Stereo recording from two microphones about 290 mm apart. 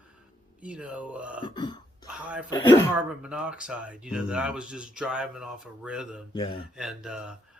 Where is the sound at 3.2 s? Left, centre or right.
Centre.